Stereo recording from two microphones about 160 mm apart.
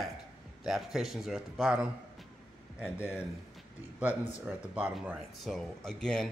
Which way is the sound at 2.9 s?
15° left (ahead or behind).